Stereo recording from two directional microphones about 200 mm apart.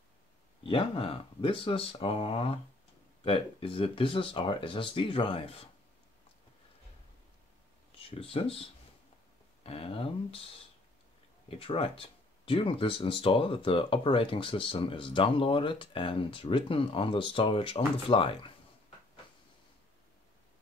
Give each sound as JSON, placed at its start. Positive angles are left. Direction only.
{"t": 0.7, "sound": "speech", "side_deg": 25}
{"t": 8.0, "sound": "speech", "side_deg": 30}
{"t": 11.5, "sound": "speech", "side_deg": 30}